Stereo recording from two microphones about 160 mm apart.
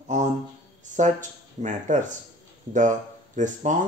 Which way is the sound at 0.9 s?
50° right (ahead or behind).